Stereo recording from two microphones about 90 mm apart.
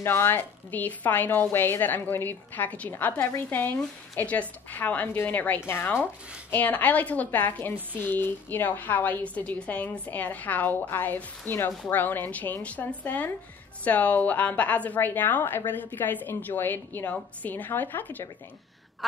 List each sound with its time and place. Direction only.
0.0 s a woman's voice: 25° left (ahead or behind)